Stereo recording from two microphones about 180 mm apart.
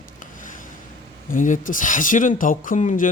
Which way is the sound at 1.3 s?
45° left (ahead or behind).